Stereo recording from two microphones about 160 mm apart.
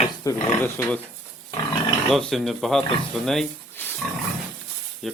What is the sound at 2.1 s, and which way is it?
Speech, centre (ahead or behind).